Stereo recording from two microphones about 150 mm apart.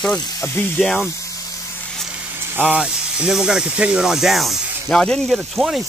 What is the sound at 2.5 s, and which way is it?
Speech, 5° right (ahead or behind).